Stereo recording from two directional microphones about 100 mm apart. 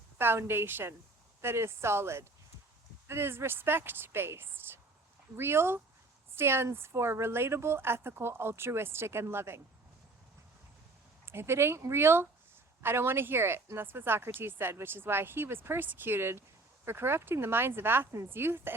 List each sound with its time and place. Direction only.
0.2 s speech: 25° right (ahead or behind)
11.3 s speech: 25° right (ahead or behind)